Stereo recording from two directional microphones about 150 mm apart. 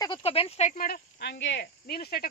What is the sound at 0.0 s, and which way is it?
Speech, 35° left (ahead or behind).